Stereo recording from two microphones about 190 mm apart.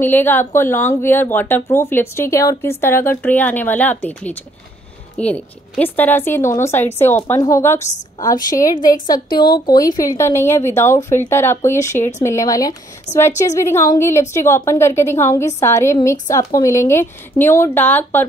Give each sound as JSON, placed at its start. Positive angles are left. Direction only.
{"t": 0.0, "sound": "a woman's voice", "side_deg": 10}
{"t": 9.3, "sound": "a woman's voice", "side_deg": 50}
{"t": 9.9, "sound": "speech", "side_deg": 15}
{"t": 13.3, "sound": "a woman's voice", "side_deg": 40}
{"t": 13.6, "sound": "speech", "side_deg": 15}